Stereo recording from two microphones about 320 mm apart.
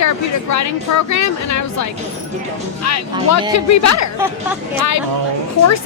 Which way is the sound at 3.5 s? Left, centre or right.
Left.